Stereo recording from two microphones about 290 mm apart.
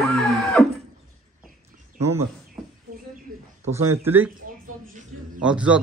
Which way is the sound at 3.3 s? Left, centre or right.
Right.